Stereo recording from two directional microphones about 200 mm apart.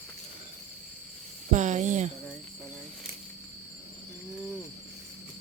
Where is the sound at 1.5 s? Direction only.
35° right (ahead or behind).